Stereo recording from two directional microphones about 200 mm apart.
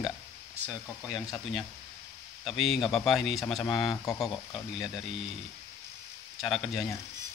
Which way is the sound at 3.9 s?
15° left (ahead or behind).